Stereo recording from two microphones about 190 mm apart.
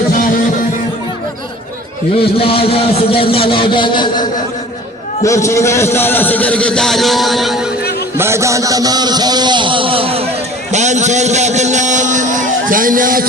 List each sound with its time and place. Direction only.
2.4 s a man's voice: 30° left (ahead or behind); by 7.7 s centre (ahead or behind)
8.2 s a man's voice: 15° right (ahead or behind); by 13.2 s 45° right (ahead or behind)